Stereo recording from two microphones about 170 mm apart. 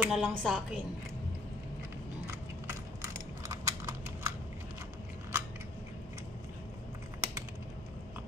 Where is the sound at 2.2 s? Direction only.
15° right (ahead or behind).